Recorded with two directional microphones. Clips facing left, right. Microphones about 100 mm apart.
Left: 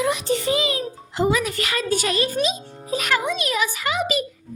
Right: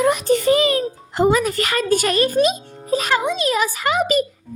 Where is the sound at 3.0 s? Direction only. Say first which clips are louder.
Right 2 dB; 25° right (ahead or behind); by 4.3 s 45° right (ahead or behind).